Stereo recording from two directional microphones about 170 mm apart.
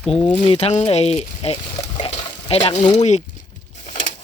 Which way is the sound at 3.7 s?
45° left (ahead or behind).